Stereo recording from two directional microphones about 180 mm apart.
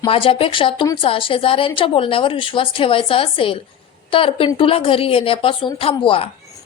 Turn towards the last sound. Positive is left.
turn(degrees=30)  # may be behind; listen again after turning